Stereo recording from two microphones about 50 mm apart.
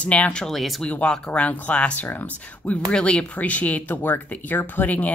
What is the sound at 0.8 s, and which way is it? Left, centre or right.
A woman's voice, left.